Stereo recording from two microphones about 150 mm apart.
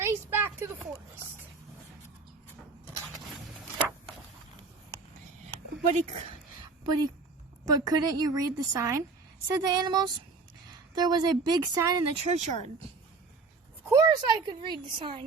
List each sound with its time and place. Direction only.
0.0 s a sound: 15° right (ahead or behind)
5.9 s speech: 45° right (ahead or behind)
6.8 s a woman's voice: 25° right (ahead or behind)
12.3 s speech: 50° right (ahead or behind)
13.8 s speech: 25° right (ahead or behind)